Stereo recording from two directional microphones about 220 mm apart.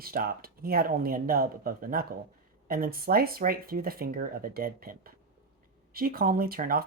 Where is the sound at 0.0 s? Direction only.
40° right (ahead or behind).